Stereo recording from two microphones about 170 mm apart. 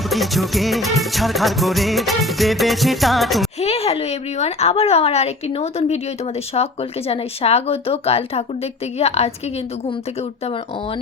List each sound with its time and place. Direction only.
0.1 s music: centre (ahead or behind)
3.6 s a woman's voice: 35° left (ahead or behind)